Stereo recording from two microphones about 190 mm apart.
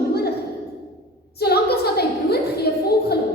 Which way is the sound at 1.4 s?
55° left (ahead or behind).